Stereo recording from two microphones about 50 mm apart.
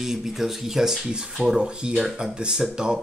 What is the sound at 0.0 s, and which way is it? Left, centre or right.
Speech, centre.